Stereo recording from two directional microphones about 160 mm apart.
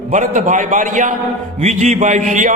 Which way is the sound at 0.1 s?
50° right (ahead or behind).